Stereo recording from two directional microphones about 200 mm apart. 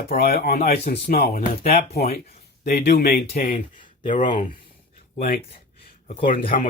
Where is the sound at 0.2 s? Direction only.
50° left (ahead or behind).